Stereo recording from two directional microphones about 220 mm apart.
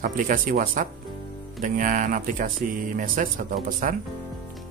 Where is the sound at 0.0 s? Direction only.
40° right (ahead or behind).